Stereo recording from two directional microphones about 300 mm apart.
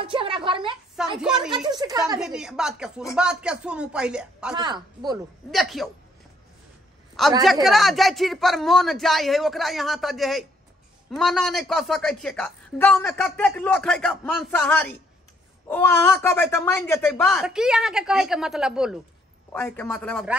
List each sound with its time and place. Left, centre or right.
0.0 s a sound: centre
0.9 s a woman's voice: centre
1.8 s speech: centre
2.1 s a woman's voice: centre
4.6 s speech: centre
5.5 s a woman's voice: centre
7.2 s a woman's voice: centre